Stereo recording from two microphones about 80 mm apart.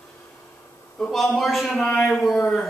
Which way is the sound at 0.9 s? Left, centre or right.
Centre.